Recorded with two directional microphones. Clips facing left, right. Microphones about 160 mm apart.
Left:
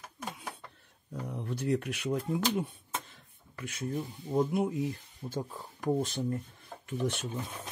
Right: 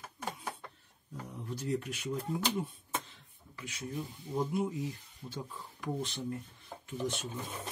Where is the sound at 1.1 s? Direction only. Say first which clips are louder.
Left 5 dB; 65° left (ahead or behind).